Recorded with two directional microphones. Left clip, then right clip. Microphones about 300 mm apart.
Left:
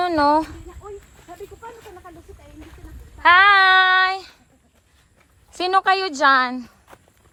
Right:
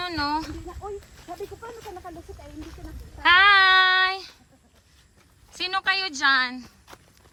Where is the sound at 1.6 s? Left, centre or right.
Right.